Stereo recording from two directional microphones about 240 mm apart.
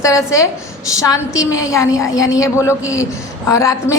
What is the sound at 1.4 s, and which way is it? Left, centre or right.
A woman's voice, centre.